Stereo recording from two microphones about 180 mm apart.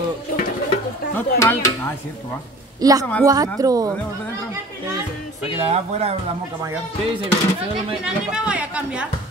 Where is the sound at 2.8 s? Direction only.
20° right (ahead or behind).